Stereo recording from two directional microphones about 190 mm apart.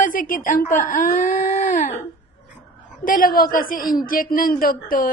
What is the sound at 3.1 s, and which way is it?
Speech, 50° left (ahead or behind).